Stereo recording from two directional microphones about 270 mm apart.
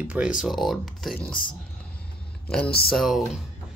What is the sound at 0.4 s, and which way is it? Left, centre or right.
Speech, centre.